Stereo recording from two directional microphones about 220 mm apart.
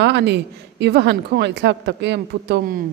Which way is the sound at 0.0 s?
50° right (ahead or behind).